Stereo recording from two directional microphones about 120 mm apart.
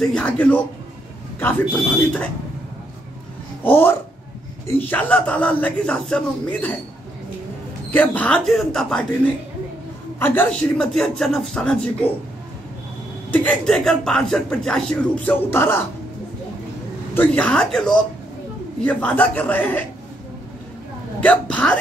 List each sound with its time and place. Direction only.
0.0 s speech: 10° left (ahead or behind)
3.6 s speech: 20° left (ahead or behind)
7.9 s speech: 15° left (ahead or behind)
10.1 s a man's voice: 20° left (ahead or behind)
10.5 s a man's voice: 5° left (ahead or behind)
13.3 s a man's voice: 10° left (ahead or behind)
15.5 s speech: 20° left (ahead or behind)
17.1 s speech: 10° left (ahead or behind)
21.2 s speech: 10° left (ahead or behind)